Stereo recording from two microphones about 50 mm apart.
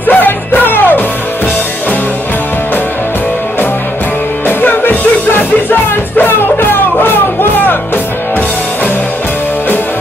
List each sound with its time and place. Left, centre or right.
0.0 s music: left
4.5 s music: left